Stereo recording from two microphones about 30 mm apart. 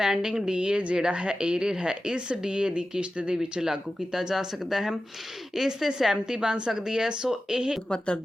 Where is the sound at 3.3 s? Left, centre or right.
Centre.